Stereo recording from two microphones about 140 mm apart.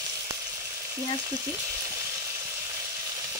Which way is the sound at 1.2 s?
25° right (ahead or behind).